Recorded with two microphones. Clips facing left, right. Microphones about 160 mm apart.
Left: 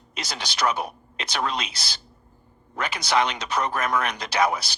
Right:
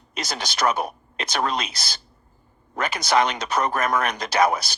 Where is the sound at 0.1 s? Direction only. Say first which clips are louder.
Right 4 dB; 45° right (ahead or behind).